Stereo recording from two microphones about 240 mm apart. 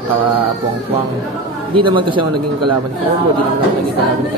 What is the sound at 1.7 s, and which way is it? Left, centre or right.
Speech, right.